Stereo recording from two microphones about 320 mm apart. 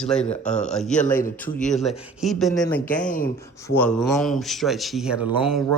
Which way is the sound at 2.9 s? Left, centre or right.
Left.